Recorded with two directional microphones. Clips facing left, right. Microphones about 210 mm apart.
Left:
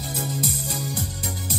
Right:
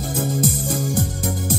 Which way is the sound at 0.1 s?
50° right (ahead or behind).